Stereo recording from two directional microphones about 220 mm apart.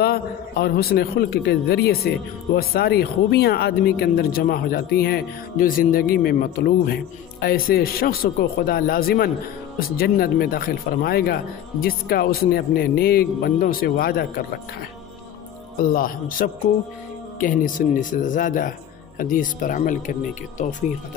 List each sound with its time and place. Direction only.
0.0 s a man's voice: 45° left (ahead or behind)
15.9 s speech: 40° left (ahead or behind)